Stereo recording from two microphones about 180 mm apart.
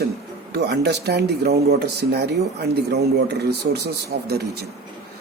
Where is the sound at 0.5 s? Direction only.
65° right (ahead or behind).